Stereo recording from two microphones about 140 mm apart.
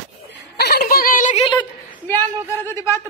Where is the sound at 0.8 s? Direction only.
90° left.